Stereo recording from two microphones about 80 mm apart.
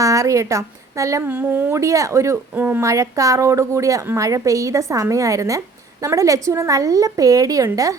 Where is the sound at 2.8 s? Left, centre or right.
Right.